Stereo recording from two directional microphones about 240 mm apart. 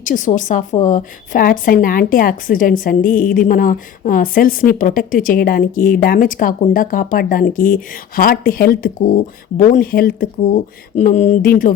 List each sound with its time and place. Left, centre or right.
0.0 s a woman's voice: left